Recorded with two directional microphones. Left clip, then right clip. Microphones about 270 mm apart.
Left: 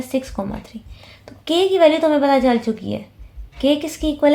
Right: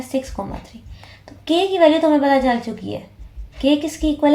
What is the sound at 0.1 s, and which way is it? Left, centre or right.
A woman's voice, left.